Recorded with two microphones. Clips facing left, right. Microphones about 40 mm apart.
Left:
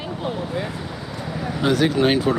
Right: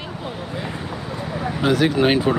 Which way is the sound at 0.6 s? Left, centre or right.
Right.